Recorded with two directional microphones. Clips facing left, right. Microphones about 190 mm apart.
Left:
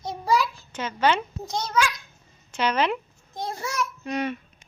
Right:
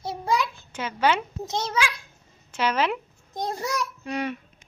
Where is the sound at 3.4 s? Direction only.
40° right (ahead or behind).